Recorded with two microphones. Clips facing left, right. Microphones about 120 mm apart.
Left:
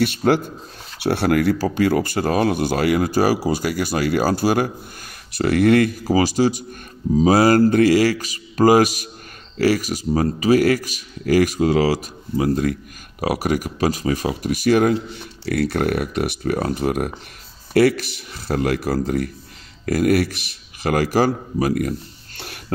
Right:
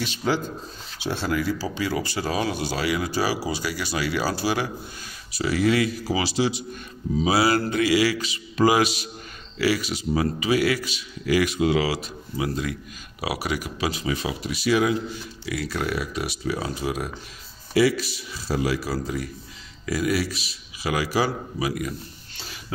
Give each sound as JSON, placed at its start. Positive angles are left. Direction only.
{"t": 0.0, "sound": "speech", "side_deg": 60}
{"t": 15.4, "sound": "speech", "side_deg": 60}